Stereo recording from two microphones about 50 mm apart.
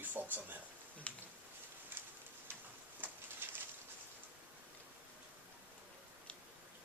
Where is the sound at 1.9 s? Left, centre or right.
Right.